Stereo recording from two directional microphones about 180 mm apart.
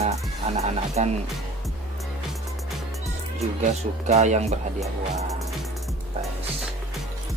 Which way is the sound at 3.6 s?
40° right (ahead or behind).